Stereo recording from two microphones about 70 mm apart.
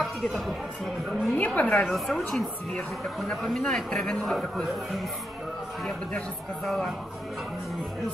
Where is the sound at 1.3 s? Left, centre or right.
Left.